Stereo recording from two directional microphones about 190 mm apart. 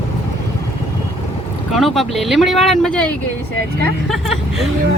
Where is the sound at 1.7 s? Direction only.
Centre (ahead or behind).